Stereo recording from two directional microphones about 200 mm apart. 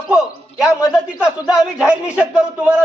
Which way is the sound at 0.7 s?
15° left (ahead or behind).